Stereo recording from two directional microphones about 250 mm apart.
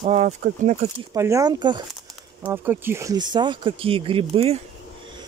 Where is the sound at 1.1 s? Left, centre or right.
Centre.